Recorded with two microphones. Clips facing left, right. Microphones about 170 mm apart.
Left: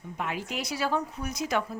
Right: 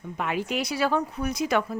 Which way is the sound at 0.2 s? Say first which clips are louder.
Right 5 dB; 70° right (ahead or behind).